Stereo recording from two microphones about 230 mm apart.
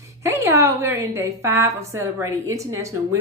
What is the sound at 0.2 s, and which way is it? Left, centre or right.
A woman's voice, centre.